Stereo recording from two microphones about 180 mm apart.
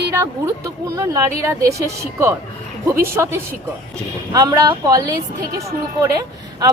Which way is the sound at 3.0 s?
15° right (ahead or behind).